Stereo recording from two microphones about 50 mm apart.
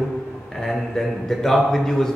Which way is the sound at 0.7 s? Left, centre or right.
Centre.